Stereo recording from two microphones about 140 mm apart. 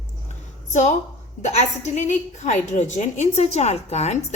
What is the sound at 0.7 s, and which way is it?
A woman's voice, 60° left (ahead or behind).